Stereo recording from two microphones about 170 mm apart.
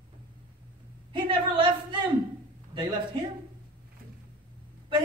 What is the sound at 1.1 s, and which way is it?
Speech, 30° right (ahead or behind).